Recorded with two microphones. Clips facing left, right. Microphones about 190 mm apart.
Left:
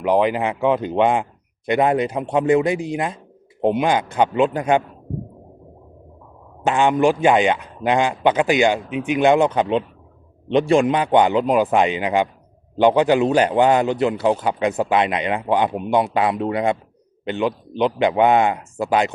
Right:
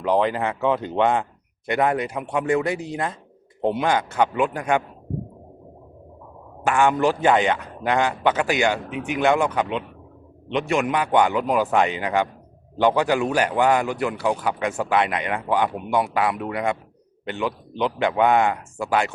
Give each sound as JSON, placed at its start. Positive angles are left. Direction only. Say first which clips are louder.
{"t": 0.0, "sound": "a man's voice", "louder": "left 3 dB", "side_deg": 15}
{"t": 6.7, "sound": "a man's voice", "louder": "left 3 dB", "side_deg": 20}